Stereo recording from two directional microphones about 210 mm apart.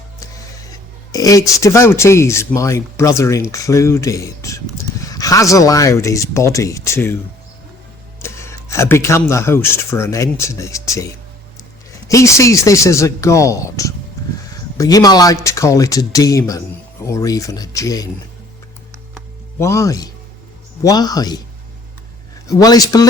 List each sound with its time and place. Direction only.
1.1 s a man's voice: 15° left (ahead or behind)
8.2 s speech: 15° left (ahead or behind)
12.0 s a man's voice: 15° left (ahead or behind)
19.5 s a man's voice: 15° left (ahead or behind)
22.4 s a man's voice: 15° left (ahead or behind)